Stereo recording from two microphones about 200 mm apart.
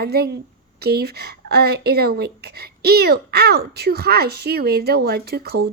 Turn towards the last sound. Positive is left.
turn(degrees=-50)  # may be behind; listen again after turning